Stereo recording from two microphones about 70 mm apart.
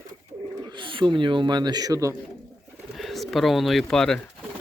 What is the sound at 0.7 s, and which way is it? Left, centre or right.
A man's voice, right.